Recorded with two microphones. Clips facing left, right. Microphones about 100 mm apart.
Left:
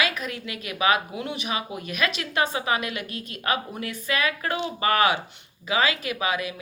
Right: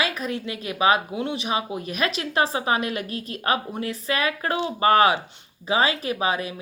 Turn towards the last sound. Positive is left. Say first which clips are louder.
# right 2 dB
turn(degrees=-35)  # may be behind; listen again after turning